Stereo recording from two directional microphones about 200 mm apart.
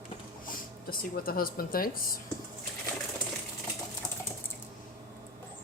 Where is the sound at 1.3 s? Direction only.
45° left (ahead or behind).